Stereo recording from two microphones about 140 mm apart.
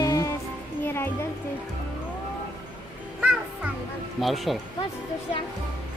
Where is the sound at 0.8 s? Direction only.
15° left (ahead or behind).